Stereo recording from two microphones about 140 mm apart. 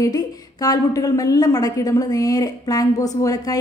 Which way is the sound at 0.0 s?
25° left (ahead or behind).